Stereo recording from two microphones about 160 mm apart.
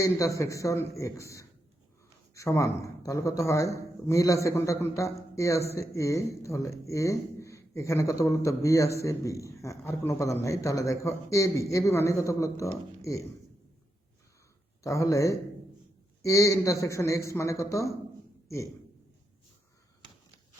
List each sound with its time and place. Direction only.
0.0 s speech: 20° left (ahead or behind)
14.8 s speech: 20° left (ahead or behind)